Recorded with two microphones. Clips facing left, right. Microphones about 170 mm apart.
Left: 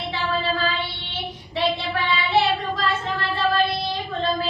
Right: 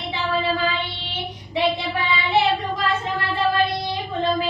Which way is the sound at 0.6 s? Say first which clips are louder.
Right 1 dB; 15° right (ahead or behind).